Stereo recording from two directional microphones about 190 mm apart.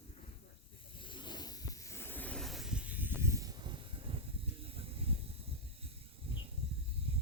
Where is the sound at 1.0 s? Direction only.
25° left (ahead or behind); by 4.2 s 25° right (ahead or behind).